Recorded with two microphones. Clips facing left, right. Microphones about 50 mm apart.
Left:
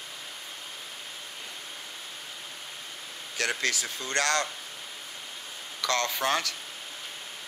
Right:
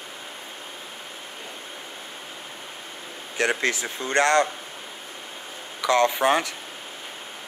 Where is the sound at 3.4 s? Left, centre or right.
Right.